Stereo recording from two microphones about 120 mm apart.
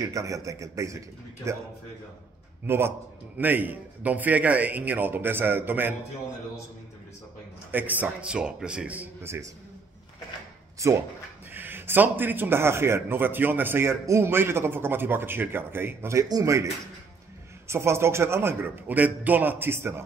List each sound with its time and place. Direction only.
0.0 s a man's voice: 30° right (ahead or behind)
2.6 s a man's voice: 20° right (ahead or behind)
7.7 s a man's voice: 15° right (ahead or behind)
10.8 s a man's voice: 25° right (ahead or behind)